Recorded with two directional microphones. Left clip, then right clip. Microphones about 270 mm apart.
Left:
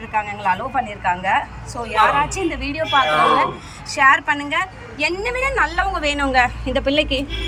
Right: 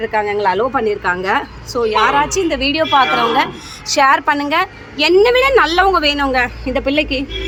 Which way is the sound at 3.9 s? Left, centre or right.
Right.